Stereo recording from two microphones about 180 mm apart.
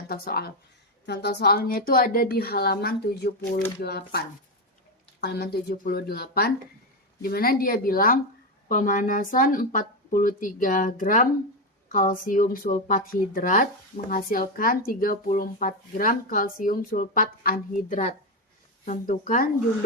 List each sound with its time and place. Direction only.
0.1 s a woman's voice: 60° left (ahead or behind)
1.0 s a woman's voice: 70° left (ahead or behind)
5.2 s a woman's voice: 65° left (ahead or behind)